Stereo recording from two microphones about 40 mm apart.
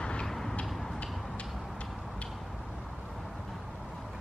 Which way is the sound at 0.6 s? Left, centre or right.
Centre.